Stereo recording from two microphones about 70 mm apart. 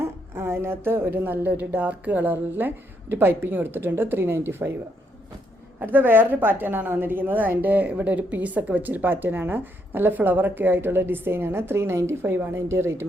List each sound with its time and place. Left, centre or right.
0.0 s a sound: right
1.2 s speech: right
5.8 s speech: right